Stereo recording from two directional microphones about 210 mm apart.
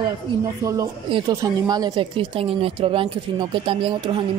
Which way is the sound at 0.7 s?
20° right (ahead or behind).